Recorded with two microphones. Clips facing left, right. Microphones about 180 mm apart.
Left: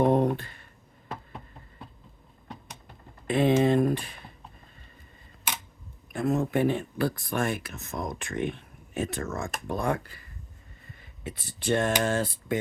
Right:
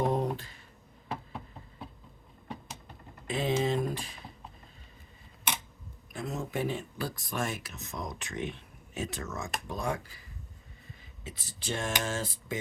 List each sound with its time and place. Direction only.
0.0 s a sound: 60° left (ahead or behind)
1.0 s knock: centre (ahead or behind)
3.2 s speech: 60° left (ahead or behind)
6.1 s speech: 60° left (ahead or behind)